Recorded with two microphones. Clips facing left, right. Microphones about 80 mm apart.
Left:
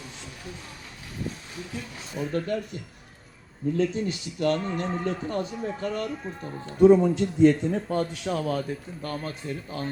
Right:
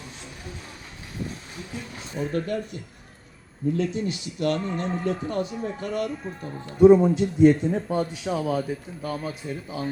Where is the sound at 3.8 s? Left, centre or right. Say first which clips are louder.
Left 1 dB; left.